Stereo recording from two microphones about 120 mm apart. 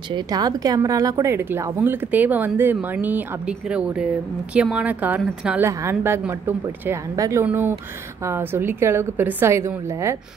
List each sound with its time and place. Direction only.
0.1 s a woman's voice: 30° right (ahead or behind); by 5.6 s 10° right (ahead or behind)
5.6 s speech: 20° right (ahead or behind)